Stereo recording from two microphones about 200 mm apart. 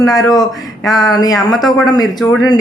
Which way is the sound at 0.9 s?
Centre (ahead or behind).